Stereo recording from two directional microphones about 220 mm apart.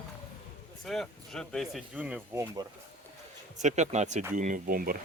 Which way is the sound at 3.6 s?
35° right (ahead or behind).